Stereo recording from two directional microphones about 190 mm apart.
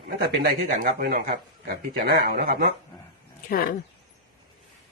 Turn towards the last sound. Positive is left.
turn(degrees=50)  # may be behind; listen again after turning